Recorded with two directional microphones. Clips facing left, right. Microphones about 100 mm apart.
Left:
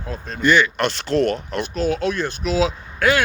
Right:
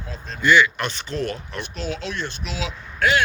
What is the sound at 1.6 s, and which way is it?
Speech, 45° left (ahead or behind).